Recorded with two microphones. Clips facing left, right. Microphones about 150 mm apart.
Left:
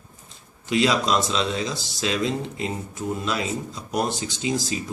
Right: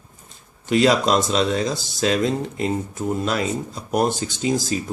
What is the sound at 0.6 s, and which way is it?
Speech, 50° right (ahead or behind).